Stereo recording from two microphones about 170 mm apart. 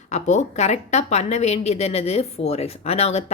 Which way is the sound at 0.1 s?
40° left (ahead or behind).